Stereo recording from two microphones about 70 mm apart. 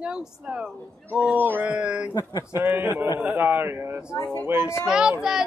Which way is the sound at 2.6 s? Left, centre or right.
Right.